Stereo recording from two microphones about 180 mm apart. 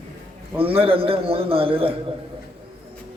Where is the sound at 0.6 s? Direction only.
30° right (ahead or behind).